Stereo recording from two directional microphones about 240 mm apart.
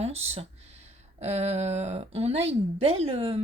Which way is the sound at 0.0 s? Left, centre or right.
Right.